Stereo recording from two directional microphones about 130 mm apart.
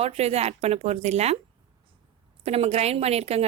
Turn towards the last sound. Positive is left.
turn(degrees=-55)  # may be behind; listen again after turning